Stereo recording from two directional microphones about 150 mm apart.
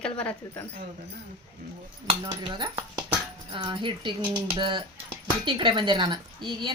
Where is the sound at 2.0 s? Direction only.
30° right (ahead or behind).